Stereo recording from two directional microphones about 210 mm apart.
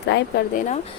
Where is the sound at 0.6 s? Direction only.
35° left (ahead or behind).